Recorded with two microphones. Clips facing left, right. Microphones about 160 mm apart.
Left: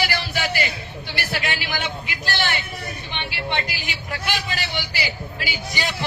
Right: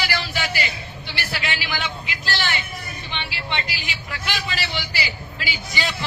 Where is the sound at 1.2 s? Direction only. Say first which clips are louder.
Left 2 dB; 50° left (ahead or behind).